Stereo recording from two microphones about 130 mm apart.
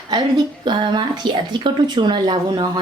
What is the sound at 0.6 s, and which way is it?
A woman's voice, 35° right (ahead or behind).